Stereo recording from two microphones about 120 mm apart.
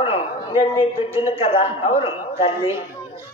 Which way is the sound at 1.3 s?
50° left (ahead or behind).